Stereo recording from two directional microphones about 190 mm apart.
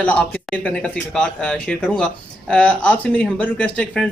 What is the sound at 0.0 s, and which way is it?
Speech, 5° left (ahead or behind).